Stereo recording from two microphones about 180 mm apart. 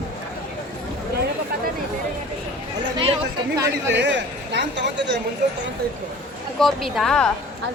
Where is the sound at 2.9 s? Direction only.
30° right (ahead or behind).